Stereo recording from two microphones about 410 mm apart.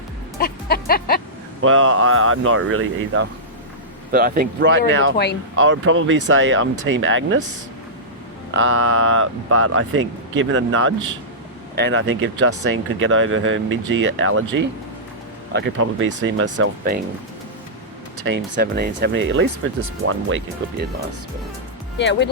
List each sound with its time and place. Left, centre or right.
0.3 s music: left
1.6 s speech: right
8.5 s speech: right
18.2 s speech: right
21.9 s music: left